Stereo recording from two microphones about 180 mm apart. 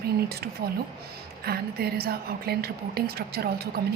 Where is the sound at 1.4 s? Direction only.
60° right (ahead or behind).